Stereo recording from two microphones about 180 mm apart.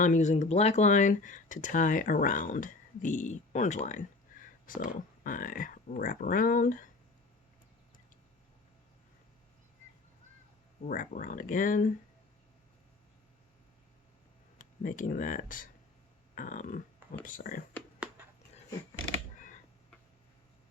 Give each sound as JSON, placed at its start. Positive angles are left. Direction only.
{"t": 0.0, "sound": "speech", "side_deg": 40}
{"t": 10.8, "sound": "speech", "side_deg": 50}
{"t": 14.6, "sound": "speech", "side_deg": 45}